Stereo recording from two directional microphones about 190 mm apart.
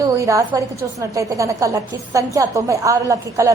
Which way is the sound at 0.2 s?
15° right (ahead or behind).